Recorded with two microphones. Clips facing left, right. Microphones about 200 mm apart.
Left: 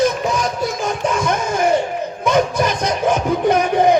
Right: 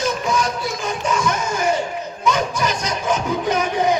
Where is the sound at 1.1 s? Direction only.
55° left (ahead or behind).